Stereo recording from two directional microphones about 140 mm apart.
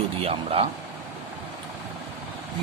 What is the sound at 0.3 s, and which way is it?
Speech, 45° right (ahead or behind).